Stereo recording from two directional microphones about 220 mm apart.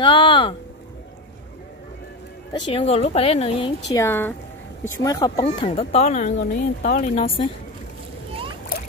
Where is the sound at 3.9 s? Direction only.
10° left (ahead or behind).